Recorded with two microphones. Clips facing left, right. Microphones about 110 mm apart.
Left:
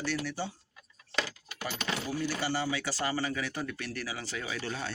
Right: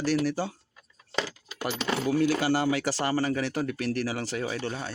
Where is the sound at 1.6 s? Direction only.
65° right (ahead or behind).